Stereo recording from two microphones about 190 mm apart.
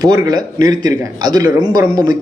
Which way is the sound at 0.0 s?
20° right (ahead or behind).